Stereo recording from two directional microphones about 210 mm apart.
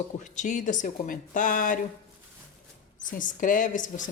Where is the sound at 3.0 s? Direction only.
40° left (ahead or behind).